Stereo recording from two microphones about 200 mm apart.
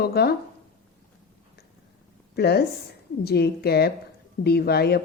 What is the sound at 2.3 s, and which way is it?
A woman's voice, 55° left (ahead or behind).